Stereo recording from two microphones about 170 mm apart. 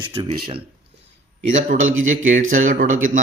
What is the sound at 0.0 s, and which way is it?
Speech, 30° right (ahead or behind).